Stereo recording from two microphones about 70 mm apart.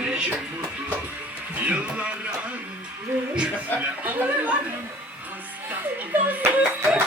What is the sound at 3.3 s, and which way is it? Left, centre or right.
Speech, centre.